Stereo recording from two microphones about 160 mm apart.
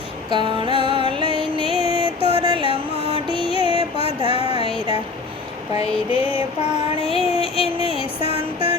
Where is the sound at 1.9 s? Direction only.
35° right (ahead or behind).